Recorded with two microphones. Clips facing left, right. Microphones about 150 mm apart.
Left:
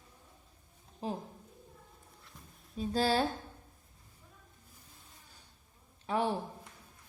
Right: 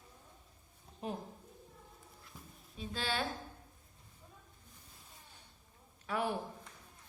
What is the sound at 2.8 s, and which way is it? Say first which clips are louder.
Speech: left 9 dB; 40° left (ahead or behind).